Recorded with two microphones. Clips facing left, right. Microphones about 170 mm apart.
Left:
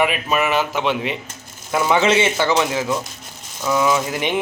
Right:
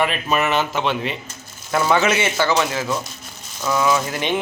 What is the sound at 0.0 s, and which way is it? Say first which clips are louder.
Speech: left 1 dB; 10° left (ahead or behind).